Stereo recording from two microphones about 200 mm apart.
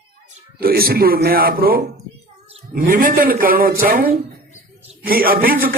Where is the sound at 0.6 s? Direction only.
50° right (ahead or behind).